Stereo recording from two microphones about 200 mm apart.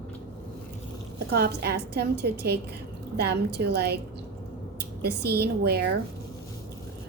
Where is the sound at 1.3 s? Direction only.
55° right (ahead or behind).